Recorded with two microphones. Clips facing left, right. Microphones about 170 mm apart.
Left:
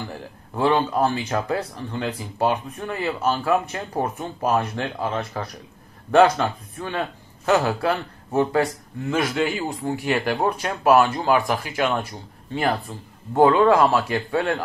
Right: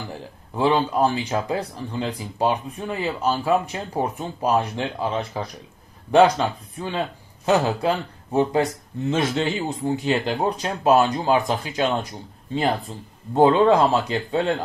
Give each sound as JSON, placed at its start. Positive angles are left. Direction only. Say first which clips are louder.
{"t": 0.1, "sound": "speech", "louder": "even", "side_deg": -15}